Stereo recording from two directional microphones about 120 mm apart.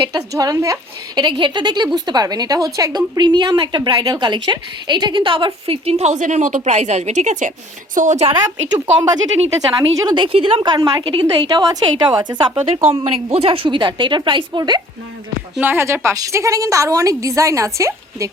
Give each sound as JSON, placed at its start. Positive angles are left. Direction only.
{"t": 0.1, "sound": "a woman's voice", "side_deg": -30}
{"t": 9.6, "sound": "a woman's voice", "side_deg": -30}
{"t": 10.2, "sound": "a woman's voice", "side_deg": -45}
{"t": 15.6, "sound": "a woman's voice", "side_deg": -20}